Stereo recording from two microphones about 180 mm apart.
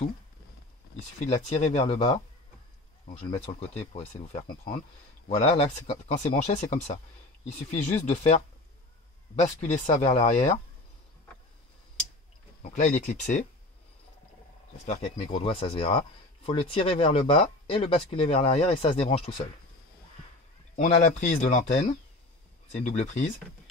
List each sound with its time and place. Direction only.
0.9 s speech: 35° left (ahead or behind)
12.7 s speech: 45° left (ahead or behind)
14.9 s speech: 30° left (ahead or behind)
20.7 s speech: 40° left (ahead or behind)